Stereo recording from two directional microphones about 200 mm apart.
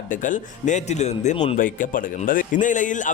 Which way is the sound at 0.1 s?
40° left (ahead or behind).